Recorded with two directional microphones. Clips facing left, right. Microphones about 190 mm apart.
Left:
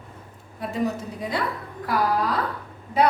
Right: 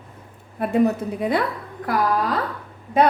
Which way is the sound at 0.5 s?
60° right (ahead or behind).